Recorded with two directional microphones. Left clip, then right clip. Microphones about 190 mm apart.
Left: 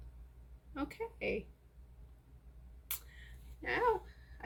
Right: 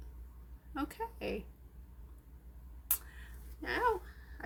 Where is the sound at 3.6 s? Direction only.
40° right (ahead or behind).